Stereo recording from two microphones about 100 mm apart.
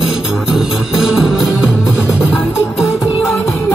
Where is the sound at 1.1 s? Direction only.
5° right (ahead or behind).